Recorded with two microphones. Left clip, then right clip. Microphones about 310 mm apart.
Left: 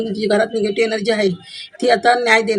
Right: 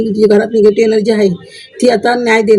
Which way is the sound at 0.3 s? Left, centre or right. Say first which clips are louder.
Right 5 dB; left.